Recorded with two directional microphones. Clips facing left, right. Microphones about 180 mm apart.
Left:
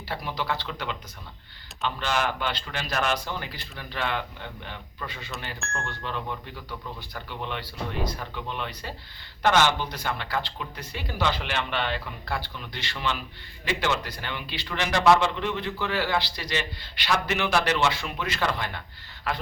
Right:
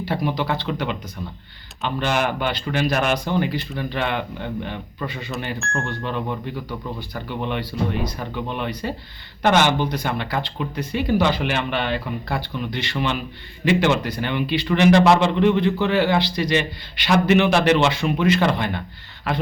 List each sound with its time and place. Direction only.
0.0 s a man's voice: 20° right (ahead or behind)
5.6 s speech: centre (ahead or behind)
7.3 s a man's voice: 15° right (ahead or behind)